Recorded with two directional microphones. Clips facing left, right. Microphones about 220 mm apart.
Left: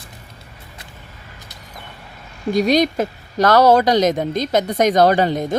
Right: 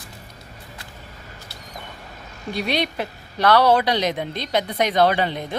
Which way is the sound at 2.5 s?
40° left (ahead or behind).